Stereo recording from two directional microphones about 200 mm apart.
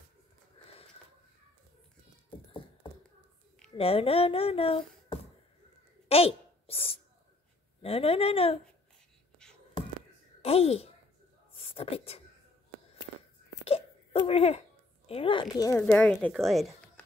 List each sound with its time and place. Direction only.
3.7 s speech: 30° left (ahead or behind)
6.0 s a sound: 30° left (ahead or behind)
7.8 s speech: 30° left (ahead or behind)
10.4 s a woman's voice: 30° left (ahead or behind)
13.7 s hiccup: 30° left (ahead or behind)
15.0 s speech: 25° left (ahead or behind); by 17.0 s 5° left (ahead or behind)